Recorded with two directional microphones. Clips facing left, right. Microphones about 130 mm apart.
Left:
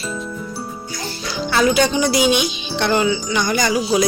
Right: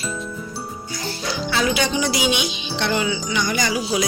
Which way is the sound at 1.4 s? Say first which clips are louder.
Left 6 dB; 45° left (ahead or behind).